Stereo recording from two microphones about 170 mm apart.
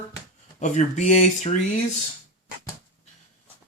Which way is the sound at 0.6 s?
45° left (ahead or behind).